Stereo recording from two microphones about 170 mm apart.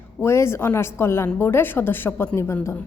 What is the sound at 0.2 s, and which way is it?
A woman's voice, 15° left (ahead or behind).